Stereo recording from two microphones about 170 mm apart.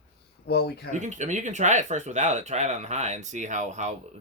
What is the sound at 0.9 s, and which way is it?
Speech, 45° right (ahead or behind).